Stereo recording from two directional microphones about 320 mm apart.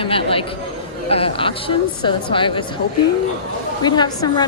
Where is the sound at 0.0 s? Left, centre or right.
Centre.